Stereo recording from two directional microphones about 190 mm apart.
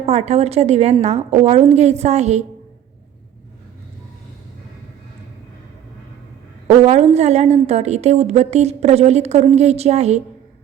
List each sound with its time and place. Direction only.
0.0 s a woman's voice: 35° right (ahead or behind)
6.7 s a woman's voice: 35° right (ahead or behind)